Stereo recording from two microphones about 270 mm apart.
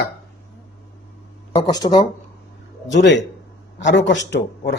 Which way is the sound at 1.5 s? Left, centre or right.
Centre.